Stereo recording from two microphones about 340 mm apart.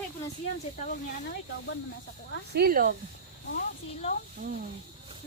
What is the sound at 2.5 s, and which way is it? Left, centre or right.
Speech, right.